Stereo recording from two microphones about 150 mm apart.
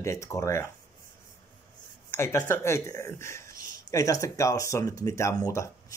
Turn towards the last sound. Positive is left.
turn(degrees=20)  # may be behind; listen again after turning